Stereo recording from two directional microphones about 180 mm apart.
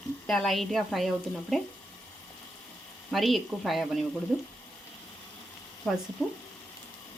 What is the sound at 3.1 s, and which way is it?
Speech, centre (ahead or behind).